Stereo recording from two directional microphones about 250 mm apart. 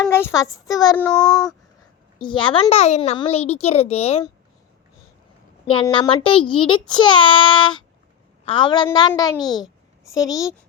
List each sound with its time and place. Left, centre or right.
0.1 s a child's voice: centre
2.1 s a child's voice: centre
5.6 s a child's voice: left
9.4 s a child's voice: centre
10.0 s a woman's voice: centre